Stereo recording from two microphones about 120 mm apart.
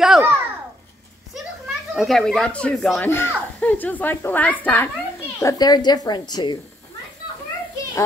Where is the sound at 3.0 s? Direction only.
20° left (ahead or behind).